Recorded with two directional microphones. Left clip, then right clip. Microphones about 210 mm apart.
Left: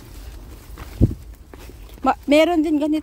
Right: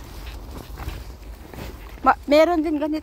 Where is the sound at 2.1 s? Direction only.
30° left (ahead or behind).